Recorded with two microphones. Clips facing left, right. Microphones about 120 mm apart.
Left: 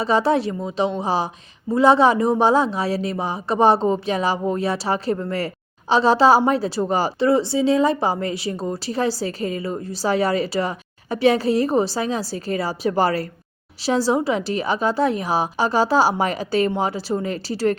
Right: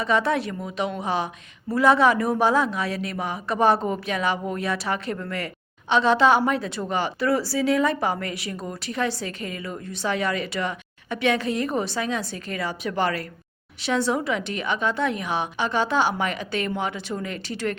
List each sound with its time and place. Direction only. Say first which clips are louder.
0.0 s a woman's voice: left 4 dB; 30° left (ahead or behind)